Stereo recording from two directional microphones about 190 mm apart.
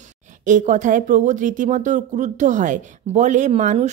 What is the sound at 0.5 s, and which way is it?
Speech, 40° right (ahead or behind).